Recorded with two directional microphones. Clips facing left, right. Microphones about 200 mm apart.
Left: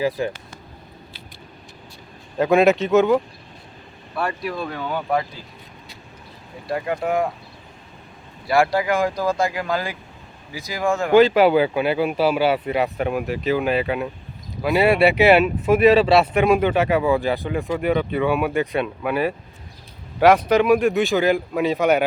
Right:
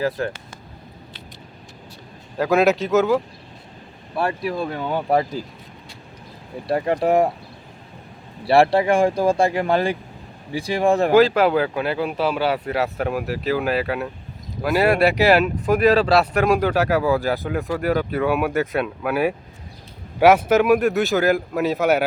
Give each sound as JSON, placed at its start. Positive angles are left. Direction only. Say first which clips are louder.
{"t": 0.2, "sound": "speech", "louder": "left 1 dB", "side_deg": 5}
{"t": 2.4, "sound": "speech", "louder": "left 2 dB", "side_deg": 0}
{"t": 4.7, "sound": "speech", "louder": "right 3 dB", "side_deg": -25}
{"t": 6.7, "sound": "speech", "louder": "right 4 dB", "side_deg": -35}
{"t": 8.4, "sound": "speech", "louder": "right 3 dB", "side_deg": -30}
{"t": 11.1, "sound": "speech", "louder": "left 5 dB", "side_deg": 0}